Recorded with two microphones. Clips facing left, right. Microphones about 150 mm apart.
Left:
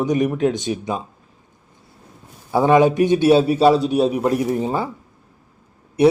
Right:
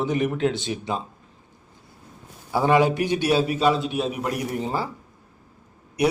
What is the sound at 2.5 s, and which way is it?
A man's voice, 20° left (ahead or behind).